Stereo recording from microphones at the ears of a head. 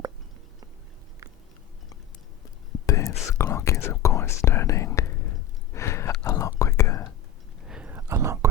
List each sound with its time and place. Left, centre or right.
2.7 s whispering: left
7.9 s whispering: right